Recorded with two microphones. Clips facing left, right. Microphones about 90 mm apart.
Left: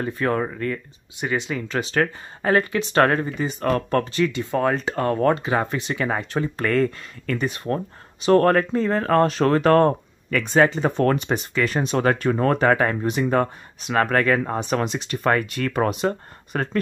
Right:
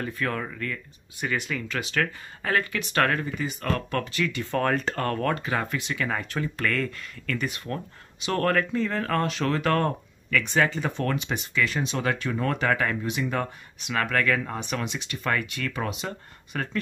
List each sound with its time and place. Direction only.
0.0 s speech: 30° left (ahead or behind); by 16.8 s 45° left (ahead or behind)